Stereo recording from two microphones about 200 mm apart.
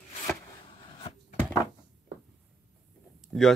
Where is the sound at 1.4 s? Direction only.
10° left (ahead or behind).